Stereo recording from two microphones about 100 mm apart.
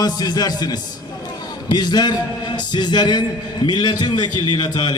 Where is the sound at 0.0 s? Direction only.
40° left (ahead or behind).